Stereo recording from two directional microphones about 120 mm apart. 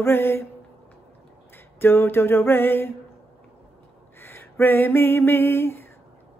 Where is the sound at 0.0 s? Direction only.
20° left (ahead or behind).